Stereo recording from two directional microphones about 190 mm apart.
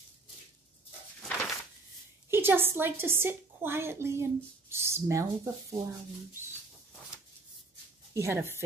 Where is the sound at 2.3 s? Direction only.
10° right (ahead or behind).